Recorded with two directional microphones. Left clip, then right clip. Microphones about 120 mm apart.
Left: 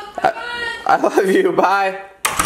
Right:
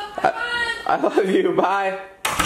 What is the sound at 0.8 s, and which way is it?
Speech, 30° left (ahead or behind).